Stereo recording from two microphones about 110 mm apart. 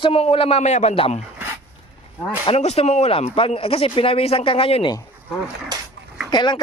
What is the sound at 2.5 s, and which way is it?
Speech, 75° left (ahead or behind).